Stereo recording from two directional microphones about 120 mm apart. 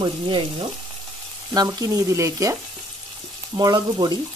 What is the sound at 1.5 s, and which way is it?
Stir, 35° right (ahead or behind).